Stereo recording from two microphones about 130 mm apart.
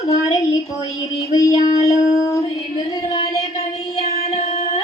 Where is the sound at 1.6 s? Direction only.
25° left (ahead or behind).